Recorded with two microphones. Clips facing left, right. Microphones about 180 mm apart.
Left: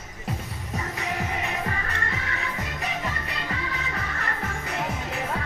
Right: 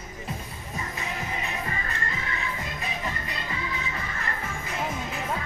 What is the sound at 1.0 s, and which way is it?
Music, 70° left (ahead or behind).